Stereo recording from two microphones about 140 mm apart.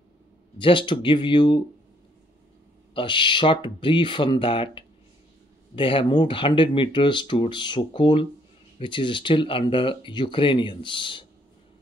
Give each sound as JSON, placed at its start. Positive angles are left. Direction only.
{"t": 0.6, "sound": "speech", "side_deg": 35}
{"t": 2.9, "sound": "speech", "side_deg": 35}